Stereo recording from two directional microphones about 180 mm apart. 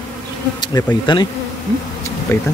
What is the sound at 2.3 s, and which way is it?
Speech, 15° left (ahead or behind).